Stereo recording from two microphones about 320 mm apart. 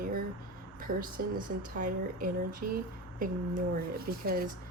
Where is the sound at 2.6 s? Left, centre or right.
Right.